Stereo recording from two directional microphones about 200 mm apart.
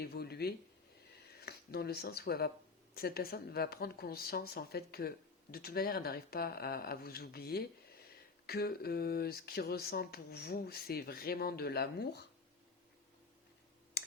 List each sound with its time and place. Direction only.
0.0 s speech: 55° left (ahead or behind)